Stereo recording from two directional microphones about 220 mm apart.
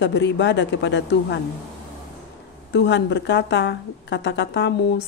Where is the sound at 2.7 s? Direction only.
55° left (ahead or behind).